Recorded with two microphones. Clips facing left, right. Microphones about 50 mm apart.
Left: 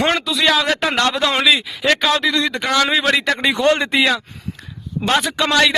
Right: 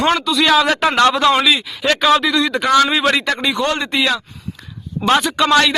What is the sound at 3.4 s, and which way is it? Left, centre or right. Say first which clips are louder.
Speech: left 3 dB; left.